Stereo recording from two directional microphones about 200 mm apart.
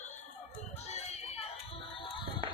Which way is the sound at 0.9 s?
35° left (ahead or behind).